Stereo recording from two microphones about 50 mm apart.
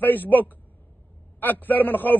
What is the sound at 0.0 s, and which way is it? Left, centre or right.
A man's voice, left.